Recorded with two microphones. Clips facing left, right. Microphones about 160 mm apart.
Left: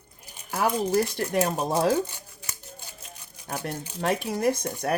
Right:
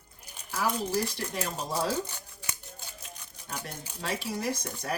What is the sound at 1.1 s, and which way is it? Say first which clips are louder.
Speech: left 9 dB; 55° left (ahead or behind).